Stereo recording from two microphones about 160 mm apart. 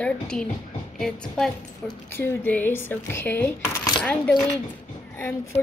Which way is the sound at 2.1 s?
15° left (ahead or behind).